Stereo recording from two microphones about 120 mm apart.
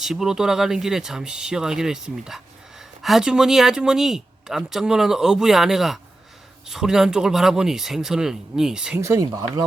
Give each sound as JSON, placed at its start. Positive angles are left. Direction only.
{"t": 0.0, "sound": "speech", "side_deg": -5}
{"t": 9.0, "sound": "speech", "side_deg": -25}